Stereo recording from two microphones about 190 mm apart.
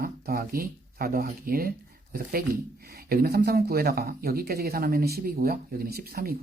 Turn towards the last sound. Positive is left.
turn(degrees=-50)  # may be behind; listen again after turning